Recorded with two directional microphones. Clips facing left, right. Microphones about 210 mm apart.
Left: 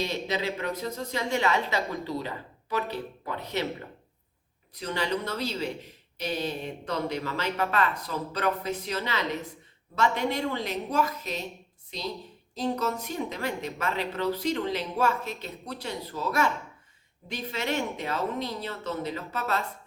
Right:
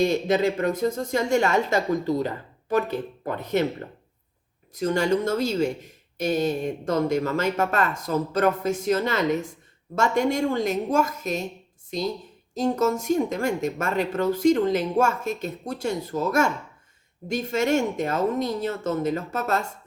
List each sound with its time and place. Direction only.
0.0 s a woman's voice: 50° right (ahead or behind)